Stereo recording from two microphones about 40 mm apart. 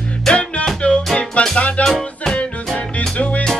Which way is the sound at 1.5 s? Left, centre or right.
Left.